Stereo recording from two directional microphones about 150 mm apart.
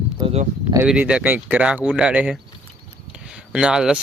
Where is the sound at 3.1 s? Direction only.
5° right (ahead or behind).